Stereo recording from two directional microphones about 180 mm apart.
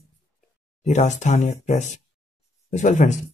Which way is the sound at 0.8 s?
40° left (ahead or behind).